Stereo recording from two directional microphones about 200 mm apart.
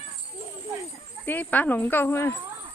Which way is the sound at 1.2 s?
10° left (ahead or behind).